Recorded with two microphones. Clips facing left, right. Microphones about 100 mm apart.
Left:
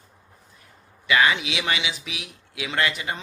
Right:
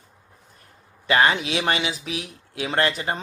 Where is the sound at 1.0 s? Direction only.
40° right (ahead or behind).